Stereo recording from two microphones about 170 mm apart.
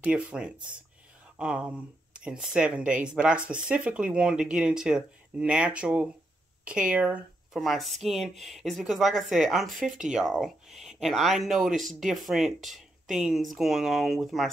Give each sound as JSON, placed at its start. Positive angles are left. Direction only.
{"t": 0.0, "sound": "speech", "side_deg": -5}